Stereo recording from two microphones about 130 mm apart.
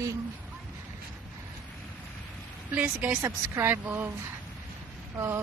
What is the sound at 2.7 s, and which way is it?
A woman's voice, 10° right (ahead or behind).